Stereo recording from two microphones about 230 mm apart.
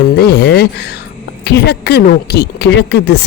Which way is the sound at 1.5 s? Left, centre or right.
Left.